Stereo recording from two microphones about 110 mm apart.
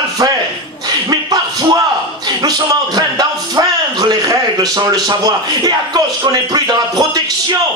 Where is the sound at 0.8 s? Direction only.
40° right (ahead or behind).